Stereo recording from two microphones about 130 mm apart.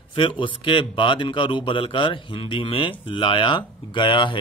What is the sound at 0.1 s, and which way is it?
A man's voice, 40° left (ahead or behind).